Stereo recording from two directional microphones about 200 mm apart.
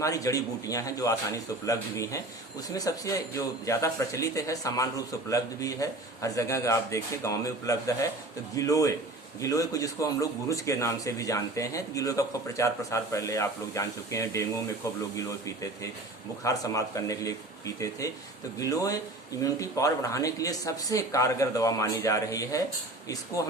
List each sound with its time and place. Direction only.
0.0 s speech: 15° left (ahead or behind)
16.4 s speech: 15° left (ahead or behind)